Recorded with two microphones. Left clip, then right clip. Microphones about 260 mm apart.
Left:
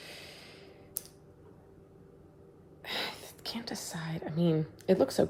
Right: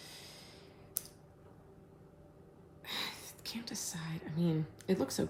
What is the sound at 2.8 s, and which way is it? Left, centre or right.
Speech, centre.